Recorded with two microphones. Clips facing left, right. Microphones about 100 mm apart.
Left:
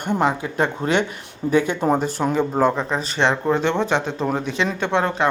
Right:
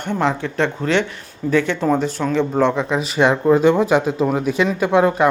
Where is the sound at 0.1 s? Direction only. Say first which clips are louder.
Even; 10° left (ahead or behind).